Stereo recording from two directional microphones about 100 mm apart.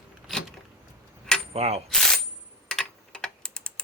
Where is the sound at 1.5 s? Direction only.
90° right.